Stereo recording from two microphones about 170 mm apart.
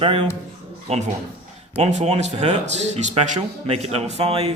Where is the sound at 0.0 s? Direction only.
35° right (ahead or behind).